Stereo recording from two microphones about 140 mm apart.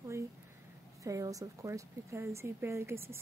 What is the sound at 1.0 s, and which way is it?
Speech, 25° right (ahead or behind).